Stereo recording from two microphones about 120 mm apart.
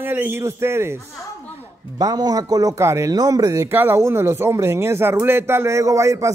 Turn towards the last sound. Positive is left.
turn(degrees=-25)  # may be behind; listen again after turning